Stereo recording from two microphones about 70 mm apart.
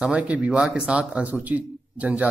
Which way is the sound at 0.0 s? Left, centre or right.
Centre.